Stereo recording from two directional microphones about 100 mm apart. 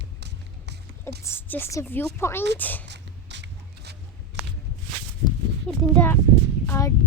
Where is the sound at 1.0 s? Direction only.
25° left (ahead or behind).